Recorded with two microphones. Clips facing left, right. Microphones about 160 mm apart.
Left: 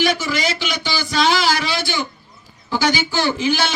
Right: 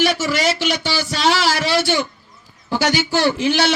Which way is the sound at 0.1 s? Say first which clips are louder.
Right 2 dB; 70° right (ahead or behind).